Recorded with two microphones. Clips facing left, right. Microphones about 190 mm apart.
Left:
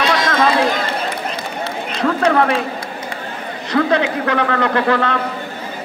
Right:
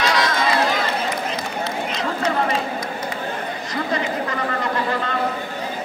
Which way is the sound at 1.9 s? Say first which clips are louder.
Left 10 dB; 60° left (ahead or behind).